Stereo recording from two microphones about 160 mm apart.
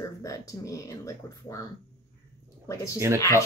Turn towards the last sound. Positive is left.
turn(degrees=20)  # may be behind; listen again after turning